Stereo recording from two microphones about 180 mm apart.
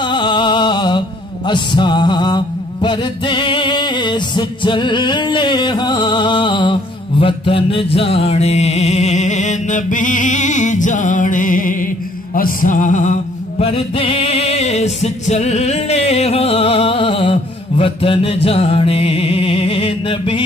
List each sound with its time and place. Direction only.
0.0 s music: 25° left (ahead or behind)